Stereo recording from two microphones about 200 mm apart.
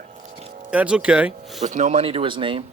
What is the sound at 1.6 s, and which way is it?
Speech, 35° right (ahead or behind).